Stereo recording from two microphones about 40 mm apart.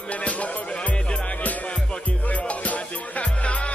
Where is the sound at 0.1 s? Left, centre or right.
Left.